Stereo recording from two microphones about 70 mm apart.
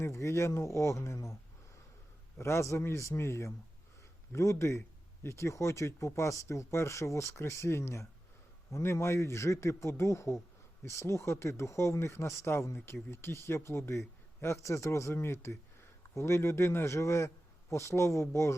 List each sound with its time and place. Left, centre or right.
0.0 s speech: left
2.4 s speech: left